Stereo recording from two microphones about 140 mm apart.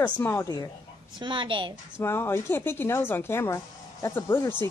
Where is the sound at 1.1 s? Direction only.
35° right (ahead or behind).